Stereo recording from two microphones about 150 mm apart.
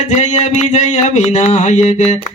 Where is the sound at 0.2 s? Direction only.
50° left (ahead or behind).